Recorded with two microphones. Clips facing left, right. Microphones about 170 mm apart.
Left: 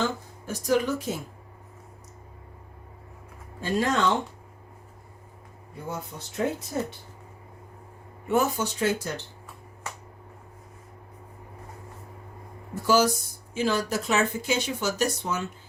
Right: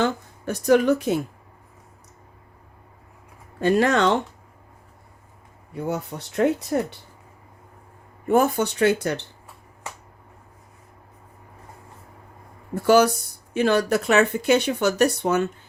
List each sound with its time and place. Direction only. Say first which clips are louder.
0.0 s speech: right 5 dB; 65° right (ahead or behind)
3.6 s speech: right 6 dB; 70° right (ahead or behind)
5.7 s speech: right 8 dB; 65° right (ahead or behind)
8.3 s speech: right 5 dB; 55° right (ahead or behind)
12.7 s speech: right 5 dB; 60° right (ahead or behind)